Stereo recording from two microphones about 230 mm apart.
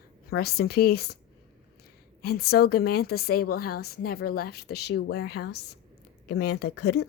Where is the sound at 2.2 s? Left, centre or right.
Left.